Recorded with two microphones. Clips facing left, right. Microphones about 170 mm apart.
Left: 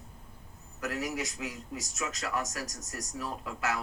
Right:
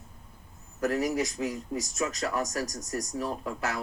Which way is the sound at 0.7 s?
35° right (ahead or behind).